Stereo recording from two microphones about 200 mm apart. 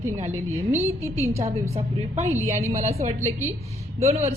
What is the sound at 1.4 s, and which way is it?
A woman's voice, 30° right (ahead or behind).